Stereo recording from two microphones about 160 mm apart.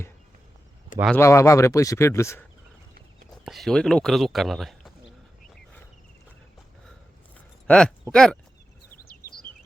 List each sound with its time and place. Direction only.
1.1 s speech: 15° left (ahead or behind)
3.4 s speech: centre (ahead or behind)
7.7 s speech: 5° left (ahead or behind)
9.0 s a sound: 70° left (ahead or behind)